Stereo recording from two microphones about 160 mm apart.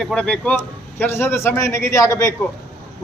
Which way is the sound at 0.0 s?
5° left (ahead or behind).